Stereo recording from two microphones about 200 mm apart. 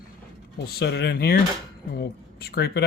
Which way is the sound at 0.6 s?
55° left (ahead or behind).